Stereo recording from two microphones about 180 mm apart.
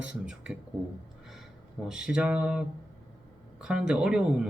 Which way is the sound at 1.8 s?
5° right (ahead or behind).